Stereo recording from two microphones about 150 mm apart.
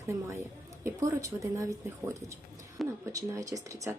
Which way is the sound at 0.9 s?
20° right (ahead or behind).